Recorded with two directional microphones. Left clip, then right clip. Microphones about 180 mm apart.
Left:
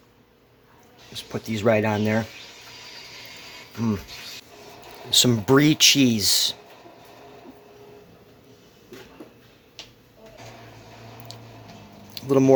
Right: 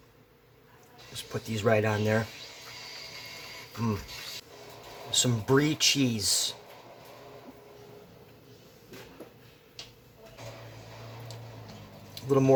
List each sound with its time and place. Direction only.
1.1 s speech: 40° left (ahead or behind)
5.1 s speech: 45° left (ahead or behind)
11.3 s tick-tock: 50° left (ahead or behind)
12.1 s a sound: 45° left (ahead or behind)